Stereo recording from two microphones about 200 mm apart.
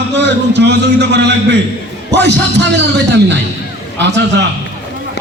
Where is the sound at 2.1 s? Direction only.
60° right (ahead or behind).